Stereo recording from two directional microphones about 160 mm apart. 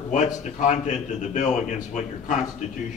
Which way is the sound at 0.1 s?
50° left (ahead or behind).